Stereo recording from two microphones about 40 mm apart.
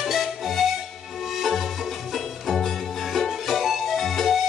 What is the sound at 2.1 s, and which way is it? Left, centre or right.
Music, centre.